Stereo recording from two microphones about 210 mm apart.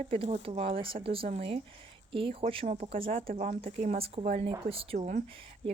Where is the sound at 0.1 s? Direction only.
25° right (ahead or behind).